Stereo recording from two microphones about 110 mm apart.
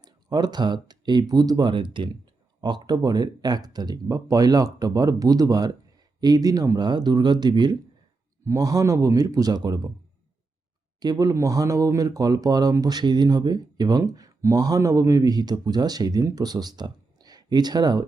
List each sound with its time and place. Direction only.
0.0 s speech: 40° right (ahead or behind)
11.0 s speech: 35° right (ahead or behind)